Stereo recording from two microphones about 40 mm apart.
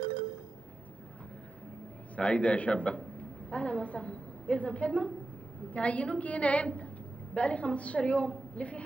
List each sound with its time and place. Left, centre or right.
2.1 s a woman's voice: left